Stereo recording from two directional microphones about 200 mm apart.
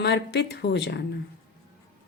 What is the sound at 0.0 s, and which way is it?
A woman's voice, 55° left (ahead or behind).